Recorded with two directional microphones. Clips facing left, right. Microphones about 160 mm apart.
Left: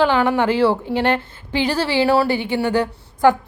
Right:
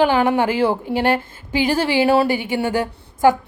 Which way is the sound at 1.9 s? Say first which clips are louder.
Even; 20° right (ahead or behind).